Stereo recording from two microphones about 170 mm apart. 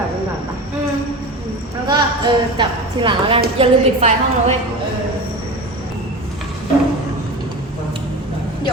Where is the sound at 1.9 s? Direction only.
25° right (ahead or behind).